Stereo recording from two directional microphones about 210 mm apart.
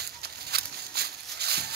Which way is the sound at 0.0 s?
50° right (ahead or behind).